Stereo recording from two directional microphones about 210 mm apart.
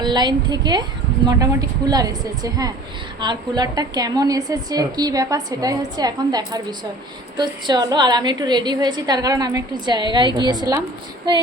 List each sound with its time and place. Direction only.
0.0 s a woman's voice: 20° right (ahead or behind)
1.9 s a woman's voice: 20° right (ahead or behind)